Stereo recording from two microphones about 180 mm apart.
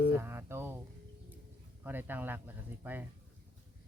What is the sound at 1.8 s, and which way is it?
Speech, 10° right (ahead or behind).